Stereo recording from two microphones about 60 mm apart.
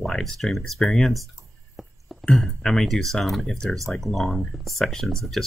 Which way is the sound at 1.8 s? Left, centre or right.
Centre.